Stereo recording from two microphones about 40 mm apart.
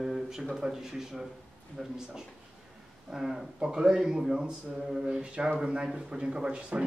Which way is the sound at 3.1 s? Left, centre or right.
Centre.